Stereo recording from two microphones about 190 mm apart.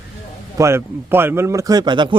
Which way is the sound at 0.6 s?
15° right (ahead or behind).